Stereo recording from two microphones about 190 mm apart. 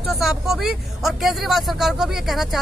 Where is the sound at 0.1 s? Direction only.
Centre (ahead or behind).